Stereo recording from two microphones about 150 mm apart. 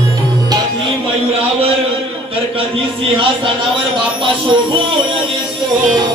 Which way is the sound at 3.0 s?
35° right (ahead or behind).